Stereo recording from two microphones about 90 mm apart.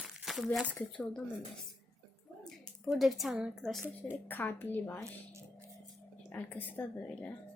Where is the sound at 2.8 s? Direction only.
Centre (ahead or behind).